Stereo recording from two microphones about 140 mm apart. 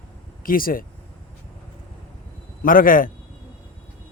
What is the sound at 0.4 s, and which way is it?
Speech, 90° left.